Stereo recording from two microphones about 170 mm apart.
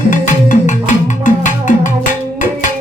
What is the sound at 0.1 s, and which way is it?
Music, 50° left (ahead or behind).